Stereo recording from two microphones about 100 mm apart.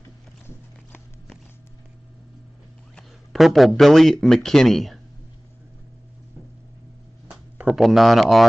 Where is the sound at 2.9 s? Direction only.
Centre (ahead or behind).